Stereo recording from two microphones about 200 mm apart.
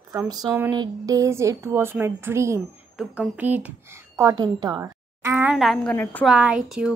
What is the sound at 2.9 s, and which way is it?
A woman's voice, 5° right (ahead or behind).